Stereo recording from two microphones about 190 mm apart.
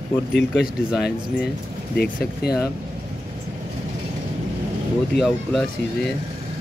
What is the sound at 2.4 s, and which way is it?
Speech, 55° left (ahead or behind).